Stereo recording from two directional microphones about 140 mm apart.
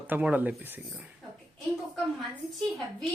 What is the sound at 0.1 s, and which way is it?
Speech, 10° right (ahead or behind).